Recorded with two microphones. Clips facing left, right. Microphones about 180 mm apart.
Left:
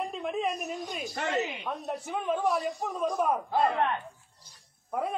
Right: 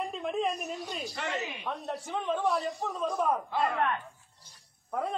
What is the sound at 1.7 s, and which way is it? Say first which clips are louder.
A man's voice: left 1 dB; 10° left (ahead or behind).